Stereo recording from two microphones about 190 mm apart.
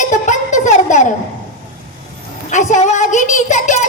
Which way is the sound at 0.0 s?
40° left (ahead or behind).